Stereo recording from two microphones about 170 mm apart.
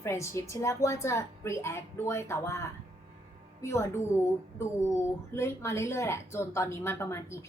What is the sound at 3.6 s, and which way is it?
Speech, 15° left (ahead or behind).